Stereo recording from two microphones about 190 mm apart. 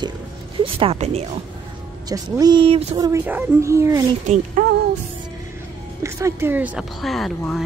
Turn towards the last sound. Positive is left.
turn(degrees=0)  # may be behind; listen again after turning